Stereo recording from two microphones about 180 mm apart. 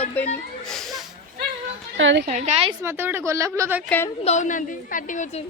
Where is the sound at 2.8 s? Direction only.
10° right (ahead or behind).